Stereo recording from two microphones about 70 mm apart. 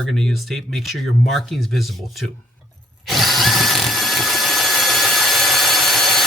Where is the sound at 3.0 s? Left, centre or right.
Centre.